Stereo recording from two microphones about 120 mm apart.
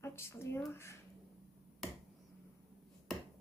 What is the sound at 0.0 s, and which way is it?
Speech, 20° left (ahead or behind).